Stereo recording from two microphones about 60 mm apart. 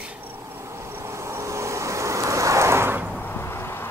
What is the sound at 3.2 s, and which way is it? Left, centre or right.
Vehicle, left.